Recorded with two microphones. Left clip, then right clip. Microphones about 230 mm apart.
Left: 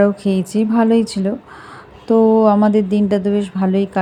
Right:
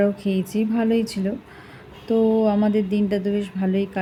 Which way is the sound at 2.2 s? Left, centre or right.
Left.